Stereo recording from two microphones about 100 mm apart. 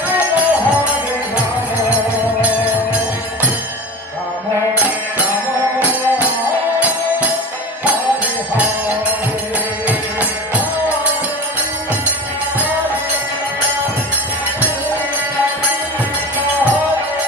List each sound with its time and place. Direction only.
0.1 s music: 15° right (ahead or behind)
4.6 s music: 15° right (ahead or behind)
8.5 s music: 15° right (ahead or behind)